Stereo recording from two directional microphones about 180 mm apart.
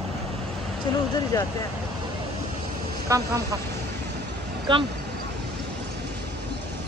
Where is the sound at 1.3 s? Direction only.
20° left (ahead or behind).